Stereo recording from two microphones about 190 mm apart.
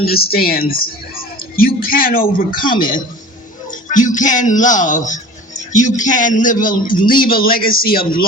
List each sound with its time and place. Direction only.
0.0 s a woman's voice: 55° left (ahead or behind)